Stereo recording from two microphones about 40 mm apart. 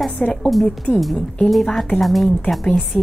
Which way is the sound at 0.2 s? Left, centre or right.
Centre.